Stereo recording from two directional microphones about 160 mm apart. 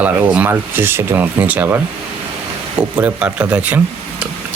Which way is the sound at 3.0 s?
10° right (ahead or behind).